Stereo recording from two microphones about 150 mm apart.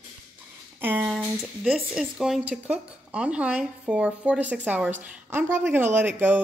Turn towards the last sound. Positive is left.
turn(degrees=-15)  # may be behind; listen again after turning